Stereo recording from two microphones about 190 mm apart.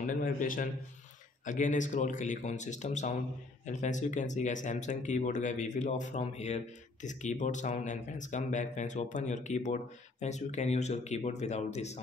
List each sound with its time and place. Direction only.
0.0 s a man's voice: 45° left (ahead or behind)